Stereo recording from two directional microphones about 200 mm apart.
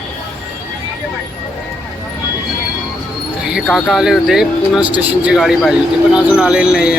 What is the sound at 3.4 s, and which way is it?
Speech, centre (ahead or behind).